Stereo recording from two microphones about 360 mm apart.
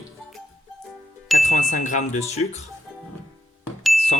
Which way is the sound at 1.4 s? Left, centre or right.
Left.